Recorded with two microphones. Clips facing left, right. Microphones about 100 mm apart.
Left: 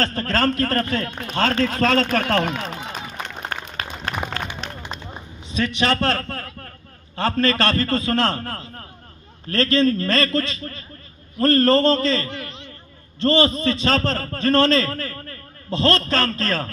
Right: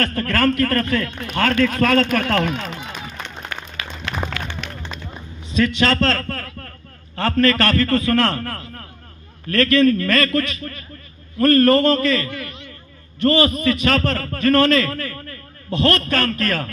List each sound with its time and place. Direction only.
0.0 s a man's voice: 25° left (ahead or behind)
4.8 s a sound: 20° left (ahead or behind)
7.2 s a man's voice: 25° left (ahead or behind)